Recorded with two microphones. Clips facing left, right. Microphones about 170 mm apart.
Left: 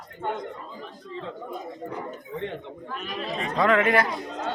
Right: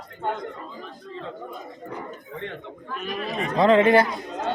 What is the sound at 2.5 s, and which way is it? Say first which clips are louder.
Speech: even; 30° left (ahead or behind).